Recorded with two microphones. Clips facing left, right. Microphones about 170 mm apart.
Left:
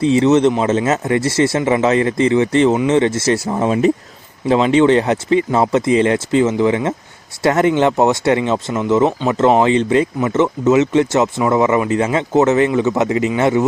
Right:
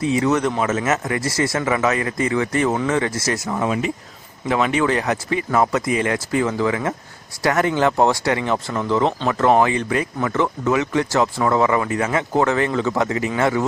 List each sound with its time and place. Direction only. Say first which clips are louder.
0.0 s speech: left 7 dB; 25° left (ahead or behind)